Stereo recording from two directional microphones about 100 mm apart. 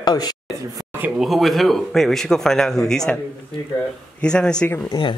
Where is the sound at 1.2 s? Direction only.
Centre (ahead or behind).